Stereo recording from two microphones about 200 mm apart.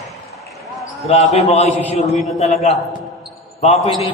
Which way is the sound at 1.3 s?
35° left (ahead or behind).